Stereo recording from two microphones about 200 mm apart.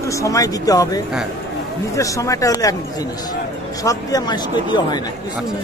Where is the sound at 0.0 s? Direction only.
15° left (ahead or behind).